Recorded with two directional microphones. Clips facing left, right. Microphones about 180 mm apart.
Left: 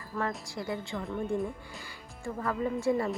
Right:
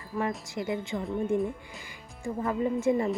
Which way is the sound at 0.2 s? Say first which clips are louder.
Right 3 dB; 20° right (ahead or behind).